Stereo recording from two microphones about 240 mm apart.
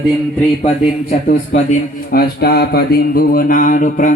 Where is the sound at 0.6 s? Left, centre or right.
Left.